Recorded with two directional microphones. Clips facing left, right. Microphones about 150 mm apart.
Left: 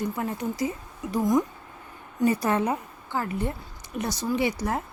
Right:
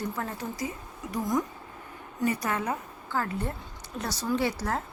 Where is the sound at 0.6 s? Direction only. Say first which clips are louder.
Left 5 dB; 25° left (ahead or behind).